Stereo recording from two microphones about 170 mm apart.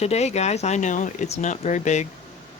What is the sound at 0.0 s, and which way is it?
Speech, 40° left (ahead or behind).